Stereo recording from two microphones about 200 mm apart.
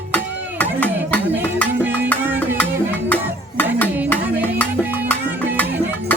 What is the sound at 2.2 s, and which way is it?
Music, 10° right (ahead or behind).